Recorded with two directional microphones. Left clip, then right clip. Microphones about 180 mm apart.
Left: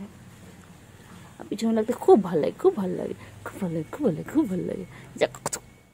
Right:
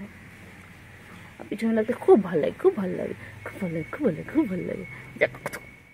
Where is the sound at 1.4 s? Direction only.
20° left (ahead or behind).